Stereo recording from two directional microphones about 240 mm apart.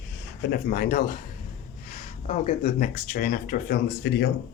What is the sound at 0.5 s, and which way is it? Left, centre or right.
Speech, left.